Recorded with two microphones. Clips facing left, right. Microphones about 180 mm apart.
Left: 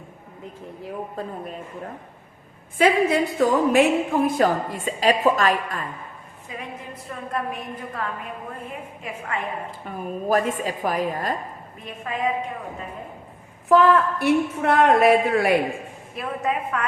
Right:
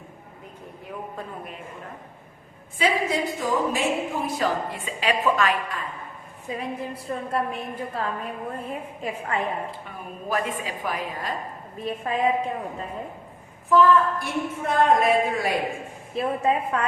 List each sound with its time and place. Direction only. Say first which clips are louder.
2.7 s a woman's voice: left 5 dB; 55° left (ahead or behind)
6.6 s a woman's voice: right 3 dB; 30° right (ahead or behind)
9.8 s a woman's voice: left 7 dB; 45° left (ahead or behind)
11.9 s a woman's voice: right 4 dB; 35° right (ahead or behind)
13.7 s a woman's voice: left 1 dB; 70° left (ahead or behind)
16.1 s a woman's voice: right 3 dB; 30° right (ahead or behind)